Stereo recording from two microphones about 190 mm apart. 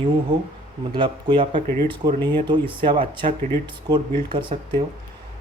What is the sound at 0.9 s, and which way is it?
Speech, 25° right (ahead or behind).